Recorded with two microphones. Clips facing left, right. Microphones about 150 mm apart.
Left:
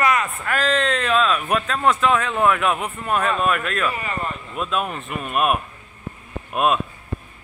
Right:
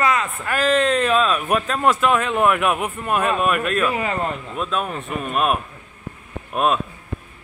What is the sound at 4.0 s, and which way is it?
Speech, 90° right.